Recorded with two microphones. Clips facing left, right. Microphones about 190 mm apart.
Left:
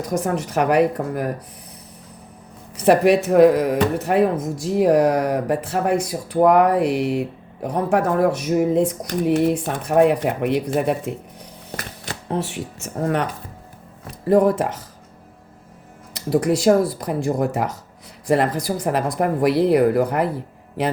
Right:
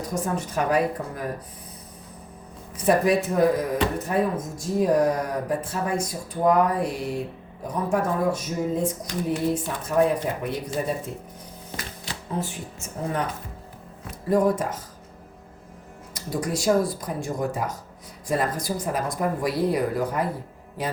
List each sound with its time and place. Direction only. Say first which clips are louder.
0.1 s speech: left 6 dB; 75° left (ahead or behind)
2.7 s speech: left 5 dB; 75° left (ahead or behind)
14.3 s speech: left 5 dB; 65° left (ahead or behind)
16.1 s speech: left 9 dB; 65° left (ahead or behind)